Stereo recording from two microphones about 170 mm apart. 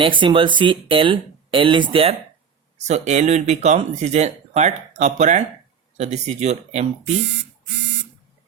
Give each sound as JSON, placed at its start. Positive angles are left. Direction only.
{"t": 0.0, "sound": "speech", "side_deg": -30}
{"t": 7.3, "sound": "speech", "side_deg": -90}